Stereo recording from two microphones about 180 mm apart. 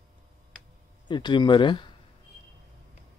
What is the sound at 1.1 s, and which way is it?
Speech, 25° left (ahead or behind).